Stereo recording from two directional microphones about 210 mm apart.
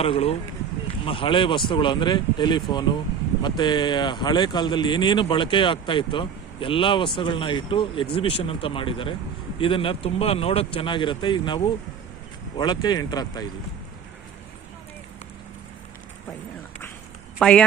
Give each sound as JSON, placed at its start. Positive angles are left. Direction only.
{"t": 0.0, "sound": "speech", "side_deg": 30}
{"t": 17.4, "sound": "a woman's voice", "side_deg": 5}